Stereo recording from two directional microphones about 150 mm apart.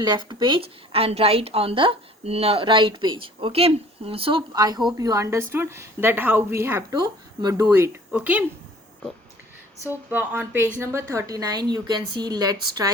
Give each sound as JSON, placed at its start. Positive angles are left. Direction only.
{"t": 0.0, "sound": "a woman's voice", "side_deg": -30}
{"t": 9.9, "sound": "a woman's voice", "side_deg": -15}